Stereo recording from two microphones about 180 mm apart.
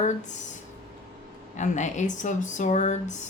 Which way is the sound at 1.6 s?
40° left (ahead or behind).